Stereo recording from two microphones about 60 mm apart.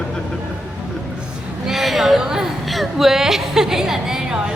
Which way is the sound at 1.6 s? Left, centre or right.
Centre.